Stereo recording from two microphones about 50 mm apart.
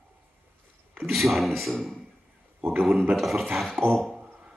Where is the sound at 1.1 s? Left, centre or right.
Centre.